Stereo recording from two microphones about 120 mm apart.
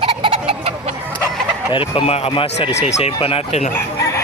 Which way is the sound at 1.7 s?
50° left (ahead or behind).